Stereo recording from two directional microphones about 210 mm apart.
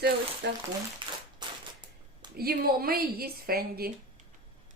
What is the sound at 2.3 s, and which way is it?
A woman's voice, 45° right (ahead or behind).